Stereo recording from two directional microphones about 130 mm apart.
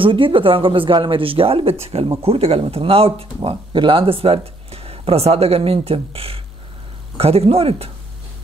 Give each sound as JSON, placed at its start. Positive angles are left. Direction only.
{"t": 0.0, "sound": "speech", "side_deg": -40}